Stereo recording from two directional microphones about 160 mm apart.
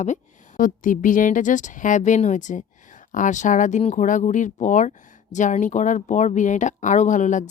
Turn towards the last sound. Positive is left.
turn(degrees=50)  # may be behind; listen again after turning